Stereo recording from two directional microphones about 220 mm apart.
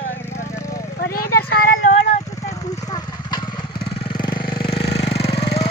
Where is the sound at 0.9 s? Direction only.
45° left (ahead or behind).